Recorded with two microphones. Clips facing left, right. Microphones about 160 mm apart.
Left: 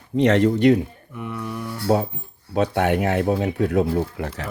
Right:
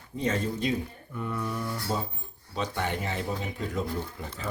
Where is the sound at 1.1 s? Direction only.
10° left (ahead or behind).